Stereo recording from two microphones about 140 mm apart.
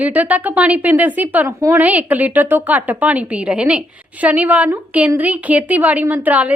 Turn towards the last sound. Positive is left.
turn(degrees=-10)  # may be behind; listen again after turning